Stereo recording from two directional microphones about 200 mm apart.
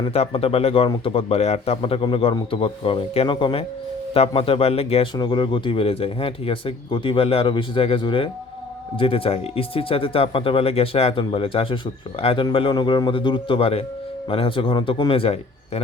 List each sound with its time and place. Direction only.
0.0 s a man's voice: 30° left (ahead or behind)